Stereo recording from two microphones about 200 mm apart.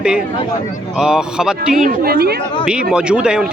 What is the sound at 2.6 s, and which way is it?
Speech, 5° right (ahead or behind).